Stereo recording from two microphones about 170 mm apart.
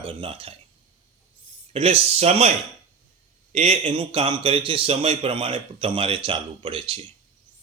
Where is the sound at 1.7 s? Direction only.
35° right (ahead or behind).